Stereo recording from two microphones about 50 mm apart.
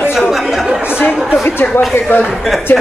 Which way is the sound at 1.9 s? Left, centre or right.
Left.